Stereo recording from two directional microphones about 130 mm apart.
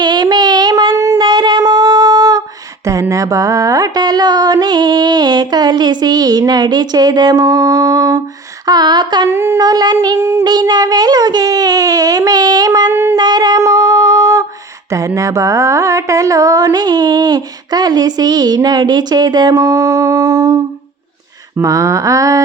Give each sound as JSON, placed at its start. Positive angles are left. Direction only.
{"t": 0.0, "sound": "child singing", "side_deg": -35}
{"t": 2.8, "sound": "music", "side_deg": -25}
{"t": 9.3, "sound": "music", "side_deg": -20}
{"t": 9.6, "sound": "music", "side_deg": -30}
{"t": 12.9, "sound": "a sound", "side_deg": -20}
{"t": 13.1, "sound": "a sound", "side_deg": -35}
{"t": 14.8, "sound": "music", "side_deg": -25}